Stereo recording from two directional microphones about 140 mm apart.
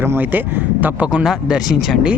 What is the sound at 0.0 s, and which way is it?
Speech, 15° right (ahead or behind).